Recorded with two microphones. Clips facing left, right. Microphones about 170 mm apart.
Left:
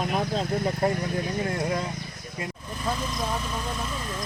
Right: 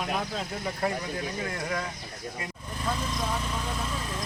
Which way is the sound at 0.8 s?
25° left (ahead or behind).